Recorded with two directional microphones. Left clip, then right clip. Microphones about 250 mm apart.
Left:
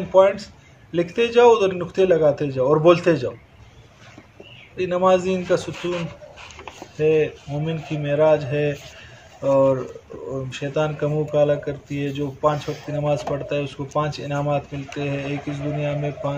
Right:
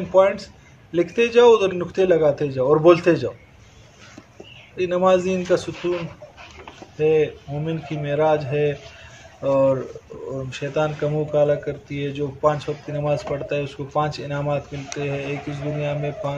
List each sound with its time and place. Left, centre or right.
0.1 s speech: centre
4.7 s speech: centre
5.8 s a sound: left
7.0 s speech: centre